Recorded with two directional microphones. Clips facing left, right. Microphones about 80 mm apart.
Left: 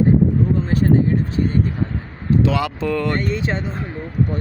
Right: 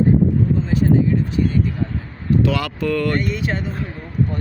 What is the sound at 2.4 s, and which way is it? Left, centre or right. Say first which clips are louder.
Speech: left 1 dB; left.